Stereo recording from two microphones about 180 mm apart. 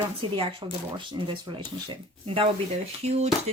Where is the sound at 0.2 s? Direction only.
30° right (ahead or behind).